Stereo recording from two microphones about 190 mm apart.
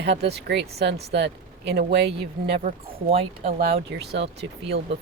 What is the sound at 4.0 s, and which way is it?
Speech, 60° right (ahead or behind).